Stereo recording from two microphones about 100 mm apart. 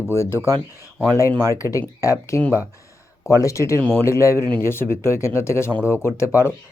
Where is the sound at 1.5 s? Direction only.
35° left (ahead or behind).